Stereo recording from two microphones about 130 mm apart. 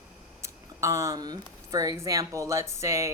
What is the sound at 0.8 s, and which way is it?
Speech, 20° right (ahead or behind).